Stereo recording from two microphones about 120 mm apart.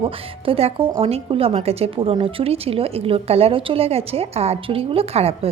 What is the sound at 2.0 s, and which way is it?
A woman's voice, 45° right (ahead or behind).